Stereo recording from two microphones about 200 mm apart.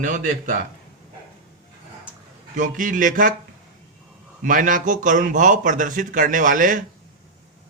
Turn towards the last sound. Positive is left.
turn(degrees=-40)  # may be behind; listen again after turning